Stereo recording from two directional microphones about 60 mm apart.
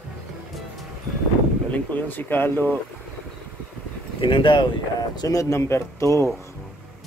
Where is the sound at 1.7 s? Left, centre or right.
Left.